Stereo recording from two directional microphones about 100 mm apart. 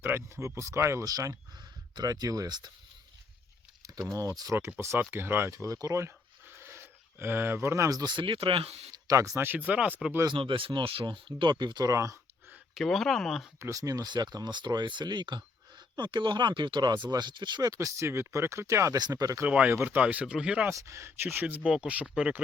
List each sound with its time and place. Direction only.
0.0 s speech: 25° right (ahead or behind); by 2.7 s 45° right (ahead or behind)
4.1 s speech: 35° right (ahead or behind); by 8.9 s 80° right
9.0 s speech: 35° right (ahead or behind)
9.4 s speech: 15° right (ahead or behind)
10.3 s speech: 60° right (ahead or behind); by 12.2 s 30° right (ahead or behind)
12.7 s speech: centre (ahead or behind)
13.6 s speech: 35° right (ahead or behind); by 17.7 s 50° right (ahead or behind)
17.7 s speech: 30° right (ahead or behind)
18.9 s speech: 40° right (ahead or behind)
19.5 s speech: 10° right (ahead or behind)
20.7 s speech: 30° right (ahead or behind); by 22.4 s 10° right (ahead or behind)